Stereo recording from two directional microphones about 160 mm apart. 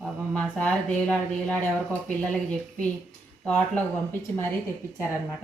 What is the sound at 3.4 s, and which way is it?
Speech, 10° left (ahead or behind).